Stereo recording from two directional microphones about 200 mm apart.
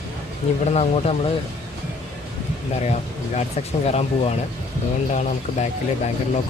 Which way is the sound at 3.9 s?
30° left (ahead or behind).